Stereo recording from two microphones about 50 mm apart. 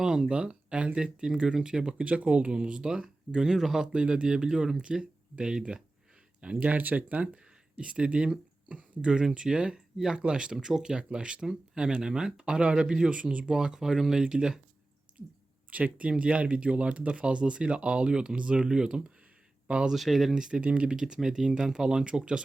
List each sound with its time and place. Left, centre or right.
0.0 s speech: centre
6.4 s speech: right
15.7 s speech: right
19.9 s speech: centre
20.3 s speech: centre